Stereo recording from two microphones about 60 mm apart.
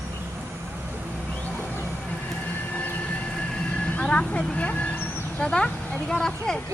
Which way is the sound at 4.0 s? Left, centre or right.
Centre.